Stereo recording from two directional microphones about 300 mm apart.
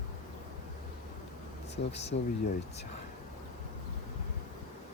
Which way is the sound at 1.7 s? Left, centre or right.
Left.